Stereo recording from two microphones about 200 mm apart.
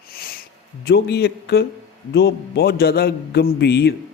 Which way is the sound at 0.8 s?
55° left (ahead or behind).